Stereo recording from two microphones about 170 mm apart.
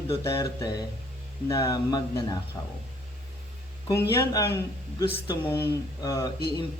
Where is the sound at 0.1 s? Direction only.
20° left (ahead or behind).